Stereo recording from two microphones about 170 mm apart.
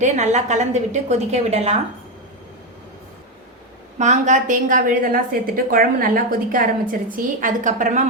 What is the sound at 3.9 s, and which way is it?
A woman's voice, 45° right (ahead or behind).